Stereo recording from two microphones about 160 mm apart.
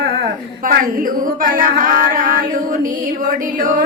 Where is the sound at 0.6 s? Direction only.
60° right (ahead or behind).